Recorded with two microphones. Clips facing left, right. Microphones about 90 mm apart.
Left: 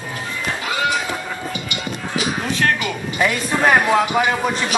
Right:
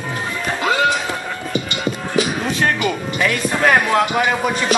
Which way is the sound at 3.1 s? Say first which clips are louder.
Left 3 dB; 15° left (ahead or behind).